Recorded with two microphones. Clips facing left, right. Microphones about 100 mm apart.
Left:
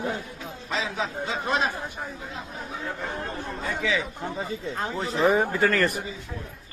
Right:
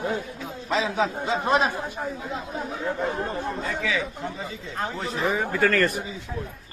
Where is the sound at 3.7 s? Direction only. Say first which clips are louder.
Left 3 dB; 20° left (ahead or behind).